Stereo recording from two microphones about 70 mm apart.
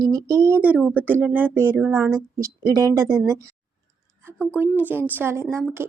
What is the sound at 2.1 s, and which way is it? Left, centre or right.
A woman's voice, right.